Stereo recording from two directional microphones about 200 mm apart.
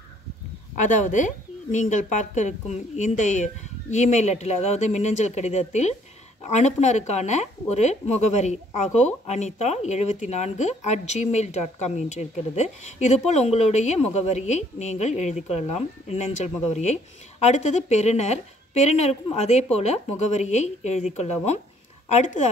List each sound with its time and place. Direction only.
0.7 s speech: 40° left (ahead or behind)